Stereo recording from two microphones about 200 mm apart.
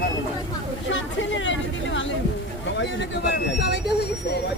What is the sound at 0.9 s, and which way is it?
Speech, 70° left (ahead or behind).